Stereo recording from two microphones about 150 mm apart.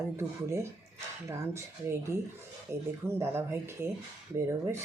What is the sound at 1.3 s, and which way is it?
Speech, 20° right (ahead or behind).